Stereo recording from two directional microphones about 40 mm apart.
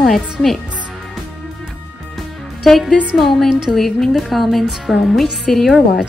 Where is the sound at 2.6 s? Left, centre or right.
Centre.